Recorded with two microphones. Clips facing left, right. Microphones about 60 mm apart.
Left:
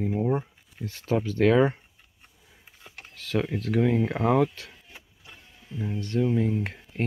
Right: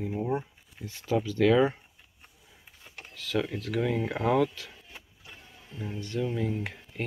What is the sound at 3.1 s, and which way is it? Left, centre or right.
Speech, left.